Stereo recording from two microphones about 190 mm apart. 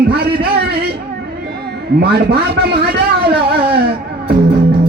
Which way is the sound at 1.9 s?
55° right (ahead or behind).